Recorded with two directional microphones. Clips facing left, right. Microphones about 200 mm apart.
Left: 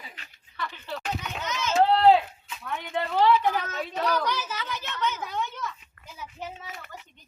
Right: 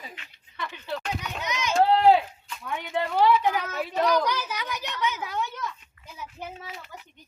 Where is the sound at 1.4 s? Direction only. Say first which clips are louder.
Even; 15° right (ahead or behind).